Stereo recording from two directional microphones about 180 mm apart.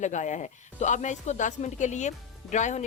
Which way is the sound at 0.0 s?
40° left (ahead or behind).